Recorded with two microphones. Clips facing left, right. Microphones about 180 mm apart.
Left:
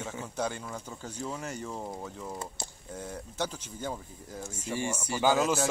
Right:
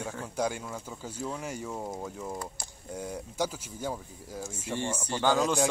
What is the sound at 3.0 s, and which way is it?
Speech, 10° right (ahead or behind).